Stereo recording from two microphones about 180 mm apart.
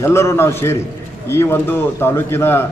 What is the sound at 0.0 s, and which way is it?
A man's voice, 15° left (ahead or behind).